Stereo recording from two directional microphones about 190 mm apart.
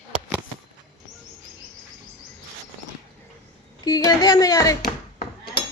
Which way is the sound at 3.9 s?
20° left (ahead or behind).